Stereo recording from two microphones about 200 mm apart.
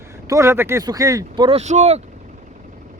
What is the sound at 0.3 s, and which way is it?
Speech, 15° right (ahead or behind).